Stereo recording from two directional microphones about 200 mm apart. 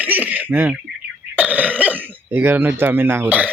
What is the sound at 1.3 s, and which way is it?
Throat clearing, 5° right (ahead or behind).